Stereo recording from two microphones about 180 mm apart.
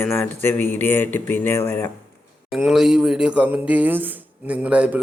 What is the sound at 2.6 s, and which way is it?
Speech, 5° right (ahead or behind).